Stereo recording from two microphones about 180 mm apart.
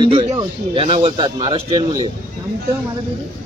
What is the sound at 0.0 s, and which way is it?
Speech, 35° right (ahead or behind).